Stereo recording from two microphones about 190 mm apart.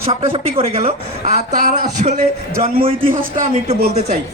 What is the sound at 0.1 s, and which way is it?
A woman's voice, 30° right (ahead or behind).